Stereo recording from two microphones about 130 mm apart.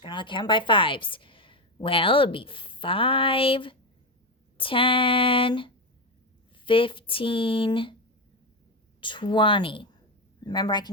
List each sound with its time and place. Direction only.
0.0 s a woman's voice: 40° left (ahead or behind)
9.0 s speech: 40° left (ahead or behind)